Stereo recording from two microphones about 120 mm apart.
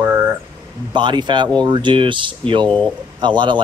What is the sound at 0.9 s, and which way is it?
Speech, 40° right (ahead or behind).